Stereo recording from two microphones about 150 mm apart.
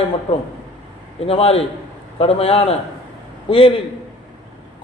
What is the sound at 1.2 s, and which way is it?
A man's voice, 40° left (ahead or behind).